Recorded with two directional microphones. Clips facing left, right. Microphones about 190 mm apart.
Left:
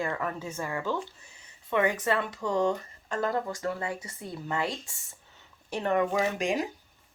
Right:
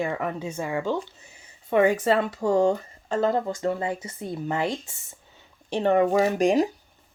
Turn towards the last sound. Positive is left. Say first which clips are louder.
# right 8 dB
turn(degrees=-35)  # may be behind; listen again after turning